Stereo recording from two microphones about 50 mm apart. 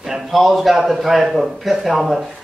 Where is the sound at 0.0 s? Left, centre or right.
Centre.